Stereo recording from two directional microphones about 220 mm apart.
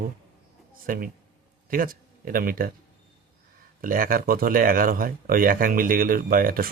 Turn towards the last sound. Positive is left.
turn(degrees=-40)  # may be behind; listen again after turning